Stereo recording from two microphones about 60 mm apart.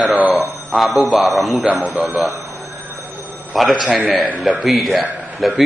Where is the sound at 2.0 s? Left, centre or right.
Centre.